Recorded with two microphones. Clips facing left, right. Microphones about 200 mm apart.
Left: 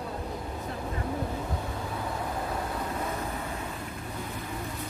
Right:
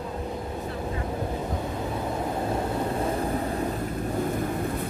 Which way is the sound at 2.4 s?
25° right (ahead or behind).